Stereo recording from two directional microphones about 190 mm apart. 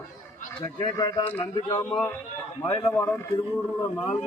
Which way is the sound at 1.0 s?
20° left (ahead or behind).